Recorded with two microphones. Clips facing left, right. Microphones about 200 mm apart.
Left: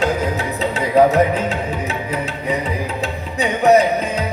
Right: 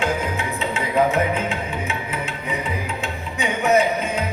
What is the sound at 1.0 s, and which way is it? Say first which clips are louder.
Music: left 6 dB; 40° left (ahead or behind).